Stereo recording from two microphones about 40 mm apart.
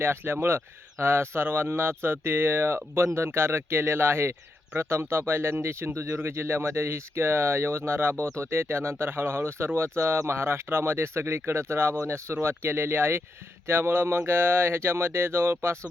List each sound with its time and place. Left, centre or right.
0.0 s speech: right
13.7 s speech: right